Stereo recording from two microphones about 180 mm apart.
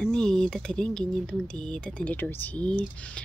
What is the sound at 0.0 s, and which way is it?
Speech, 5° left (ahead or behind).